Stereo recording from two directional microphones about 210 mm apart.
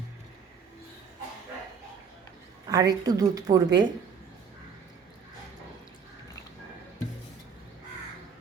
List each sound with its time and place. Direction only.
2.6 s a woman's voice: 15° right (ahead or behind)